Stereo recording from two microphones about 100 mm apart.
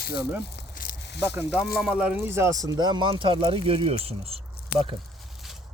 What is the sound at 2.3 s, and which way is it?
Speech, 25° right (ahead or behind).